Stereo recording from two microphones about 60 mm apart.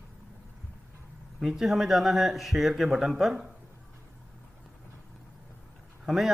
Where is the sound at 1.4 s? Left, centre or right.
Centre.